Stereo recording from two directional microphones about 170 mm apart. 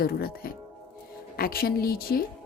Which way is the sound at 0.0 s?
65° left (ahead or behind).